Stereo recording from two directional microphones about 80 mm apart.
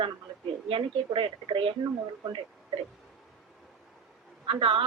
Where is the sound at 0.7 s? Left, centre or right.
Right.